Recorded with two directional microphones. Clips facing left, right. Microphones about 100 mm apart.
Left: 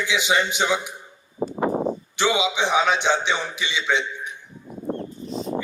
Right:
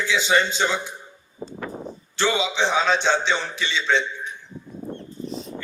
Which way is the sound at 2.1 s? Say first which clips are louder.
Even; 15° left (ahead or behind).